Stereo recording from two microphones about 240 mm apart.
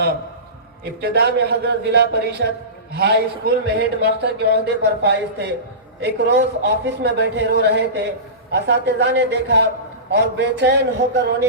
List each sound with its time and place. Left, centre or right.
1.0 s speech: right